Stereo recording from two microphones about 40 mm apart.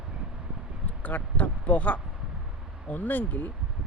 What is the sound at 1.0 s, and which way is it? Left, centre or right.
Speech, left.